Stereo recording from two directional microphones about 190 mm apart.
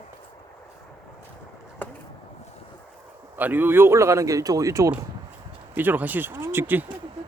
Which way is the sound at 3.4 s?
10° right (ahead or behind).